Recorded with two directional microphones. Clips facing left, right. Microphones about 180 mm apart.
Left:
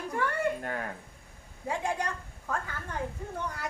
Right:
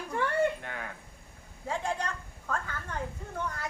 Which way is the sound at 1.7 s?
15° left (ahead or behind).